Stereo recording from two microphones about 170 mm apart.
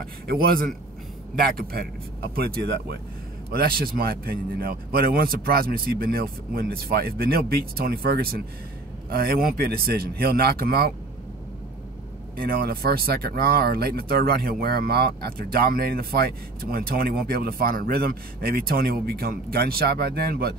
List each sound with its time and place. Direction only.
0.3 s speech: 60° right (ahead or behind)
3.4 s speech: 65° right (ahead or behind)
12.4 s speech: 60° right (ahead or behind)